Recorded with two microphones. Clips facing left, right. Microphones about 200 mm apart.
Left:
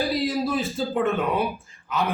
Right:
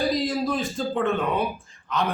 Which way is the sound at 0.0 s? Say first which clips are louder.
Even; centre (ahead or behind).